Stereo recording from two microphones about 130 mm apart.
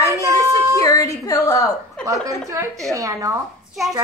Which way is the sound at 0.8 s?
25° left (ahead or behind).